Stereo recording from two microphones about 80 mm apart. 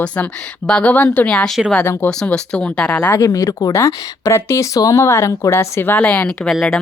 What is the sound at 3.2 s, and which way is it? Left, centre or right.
Speech, left.